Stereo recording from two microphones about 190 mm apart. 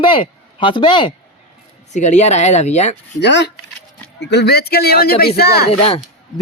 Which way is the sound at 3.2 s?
65° left (ahead or behind).